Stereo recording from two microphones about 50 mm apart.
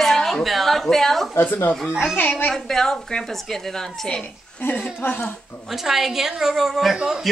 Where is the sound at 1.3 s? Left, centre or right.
Left.